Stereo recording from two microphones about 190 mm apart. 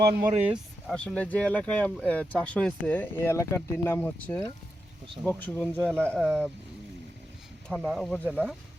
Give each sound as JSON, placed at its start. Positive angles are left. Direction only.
{"t": 0.0, "sound": "speech", "side_deg": -55}
{"t": 0.4, "sound": "speech", "side_deg": 0}
{"t": 7.7, "sound": "speech", "side_deg": 0}